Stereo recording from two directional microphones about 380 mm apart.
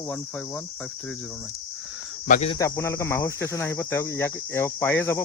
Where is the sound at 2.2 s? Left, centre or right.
Centre.